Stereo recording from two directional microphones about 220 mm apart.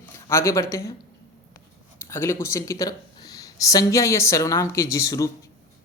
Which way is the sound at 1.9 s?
10° left (ahead or behind).